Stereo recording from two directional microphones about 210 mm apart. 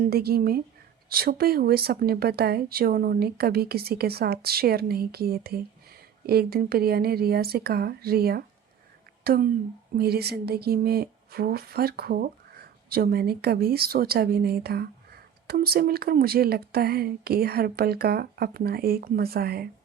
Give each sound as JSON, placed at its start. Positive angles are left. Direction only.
{"t": 0.0, "sound": "speech", "side_deg": -50}